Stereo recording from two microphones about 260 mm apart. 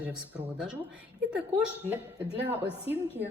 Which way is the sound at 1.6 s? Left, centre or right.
Centre.